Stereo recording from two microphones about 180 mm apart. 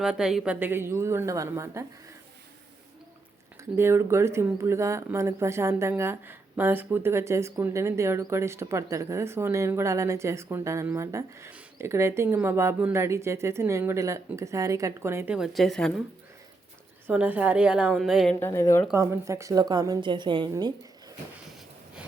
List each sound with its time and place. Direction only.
0.0 s speech: 5° right (ahead or behind)
3.6 s speech: 15° right (ahead or behind); by 16.0 s centre (ahead or behind)
17.1 s speech: 10° right (ahead or behind)
18.3 s speech: 15° left (ahead or behind)
18.9 s a woman's voice: 15° right (ahead or behind)